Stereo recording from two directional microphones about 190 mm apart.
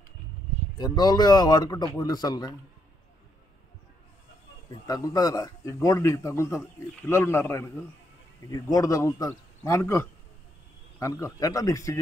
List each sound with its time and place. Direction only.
0.7 s a man's voice: 20° left (ahead or behind)
4.8 s a man's voice: 20° left (ahead or behind)
8.7 s a man's voice: 15° left (ahead or behind)